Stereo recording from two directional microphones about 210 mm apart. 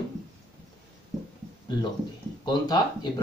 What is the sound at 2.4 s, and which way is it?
Speech, 20° left (ahead or behind).